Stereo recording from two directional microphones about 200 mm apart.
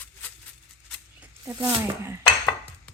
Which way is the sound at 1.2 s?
15° right (ahead or behind).